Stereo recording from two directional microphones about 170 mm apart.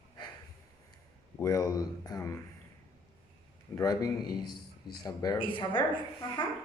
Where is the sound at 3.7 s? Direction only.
20° left (ahead or behind).